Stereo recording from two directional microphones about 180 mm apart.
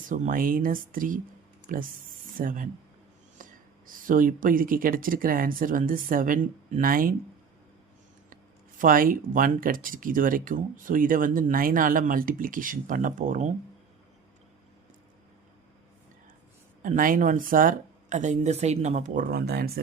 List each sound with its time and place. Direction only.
0.1 s speech: 50° right (ahead or behind)
3.4 s a sound: 45° right (ahead or behind)
3.8 s speech: 50° right (ahead or behind)
8.8 s speech: 50° right (ahead or behind)
16.8 s speech: 50° right (ahead or behind)